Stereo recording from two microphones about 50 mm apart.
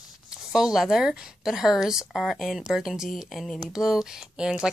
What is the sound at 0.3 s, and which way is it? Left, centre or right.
Speech, centre.